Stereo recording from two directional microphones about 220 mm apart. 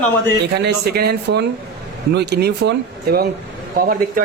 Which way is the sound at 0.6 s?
45° right (ahead or behind).